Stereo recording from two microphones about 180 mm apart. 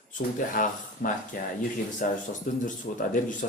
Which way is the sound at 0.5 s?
45° left (ahead or behind).